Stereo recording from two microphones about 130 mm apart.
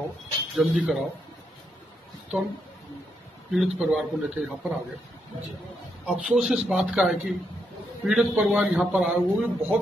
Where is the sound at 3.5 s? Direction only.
Centre (ahead or behind).